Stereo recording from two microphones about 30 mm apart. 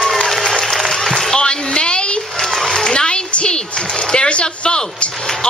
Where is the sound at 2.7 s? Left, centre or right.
Left.